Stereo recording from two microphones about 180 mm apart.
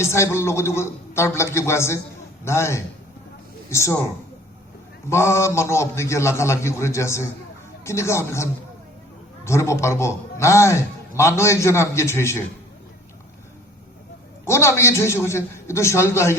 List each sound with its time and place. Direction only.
0.0 s a man's voice: 15° left (ahead or behind)
5.0 s a man's voice: 15° left (ahead or behind)
14.4 s a man's voice: 15° left (ahead or behind)